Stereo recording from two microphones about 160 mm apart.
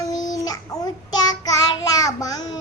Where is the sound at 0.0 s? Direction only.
25° left (ahead or behind).